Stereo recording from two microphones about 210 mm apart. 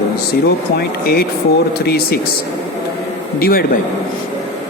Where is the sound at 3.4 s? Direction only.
45° left (ahead or behind).